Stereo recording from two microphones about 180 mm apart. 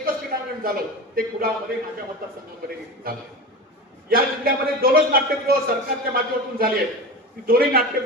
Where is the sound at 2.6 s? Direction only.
55° right (ahead or behind).